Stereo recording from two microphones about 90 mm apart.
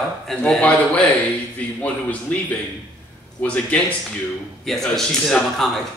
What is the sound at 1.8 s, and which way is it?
Speech, 15° left (ahead or behind).